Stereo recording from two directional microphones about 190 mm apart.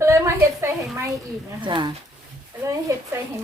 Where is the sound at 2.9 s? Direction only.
15° right (ahead or behind).